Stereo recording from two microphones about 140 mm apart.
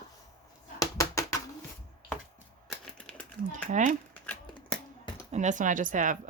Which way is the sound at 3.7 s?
60° right (ahead or behind).